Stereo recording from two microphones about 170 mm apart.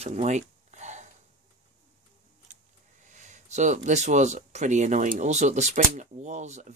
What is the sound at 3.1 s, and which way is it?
Speech, 45° right (ahead or behind).